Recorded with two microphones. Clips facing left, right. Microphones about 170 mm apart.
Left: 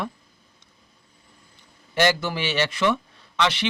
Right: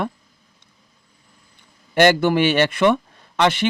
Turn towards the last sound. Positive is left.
turn(degrees=-50)  # may be behind; listen again after turning